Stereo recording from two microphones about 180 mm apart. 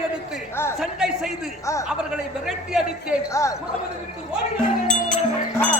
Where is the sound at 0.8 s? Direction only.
Centre (ahead or behind).